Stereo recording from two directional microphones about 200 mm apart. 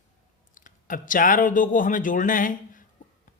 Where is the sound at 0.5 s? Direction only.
40° left (ahead or behind).